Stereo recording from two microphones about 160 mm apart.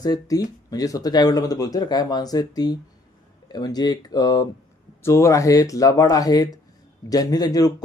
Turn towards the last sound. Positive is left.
turn(degrees=25)  # may be behind; listen again after turning